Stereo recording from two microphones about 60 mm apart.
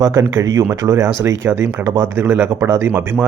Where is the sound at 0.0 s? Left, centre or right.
Right.